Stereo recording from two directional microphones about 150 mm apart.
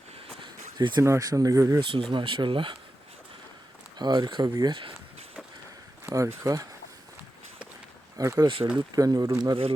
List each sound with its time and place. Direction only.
0.8 s speech: 30° right (ahead or behind)
1.8 s speech: 35° right (ahead or behind)
3.9 s speech: 30° right (ahead or behind)
6.1 s speech: 20° right (ahead or behind)
8.2 s speech: 20° right (ahead or behind)
8.4 s speech: 35° right (ahead or behind)
9.0 s speech: 25° right (ahead or behind)